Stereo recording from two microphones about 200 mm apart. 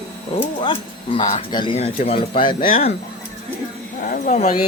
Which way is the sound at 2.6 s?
45° left (ahead or behind).